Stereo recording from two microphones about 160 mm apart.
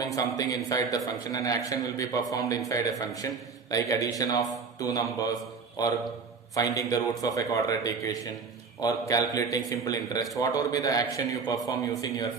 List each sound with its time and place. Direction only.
0.0 s a man's voice: 25° left (ahead or behind)